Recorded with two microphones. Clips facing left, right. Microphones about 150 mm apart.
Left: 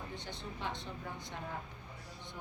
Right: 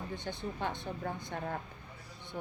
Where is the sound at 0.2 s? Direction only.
50° right (ahead or behind).